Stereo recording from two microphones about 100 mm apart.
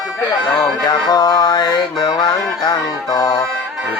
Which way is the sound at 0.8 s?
45° left (ahead or behind).